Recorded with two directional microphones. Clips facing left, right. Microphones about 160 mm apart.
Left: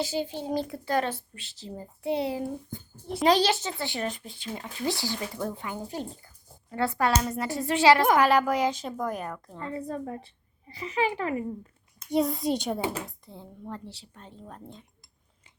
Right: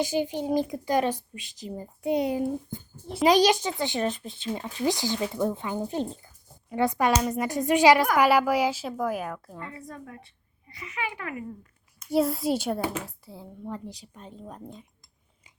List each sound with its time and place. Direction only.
0.0 s speech: 15° right (ahead or behind)
9.7 s a woman's voice: 30° left (ahead or behind)
12.1 s speech: centre (ahead or behind)